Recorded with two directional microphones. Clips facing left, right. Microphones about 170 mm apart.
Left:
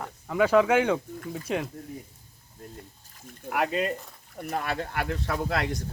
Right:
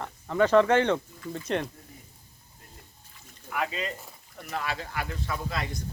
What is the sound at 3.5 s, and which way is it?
Speech, 60° left (ahead or behind).